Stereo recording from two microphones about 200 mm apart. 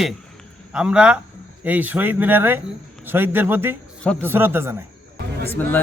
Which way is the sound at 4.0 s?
5° left (ahead or behind).